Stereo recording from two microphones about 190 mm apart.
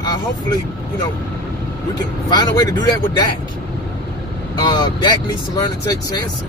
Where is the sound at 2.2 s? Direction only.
20° left (ahead or behind).